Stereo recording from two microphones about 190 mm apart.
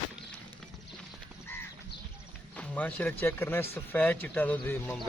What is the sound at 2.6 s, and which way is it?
Speech, 10° left (ahead or behind).